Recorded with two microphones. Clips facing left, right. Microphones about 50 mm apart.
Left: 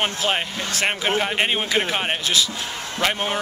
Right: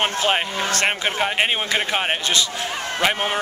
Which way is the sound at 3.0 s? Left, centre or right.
Centre.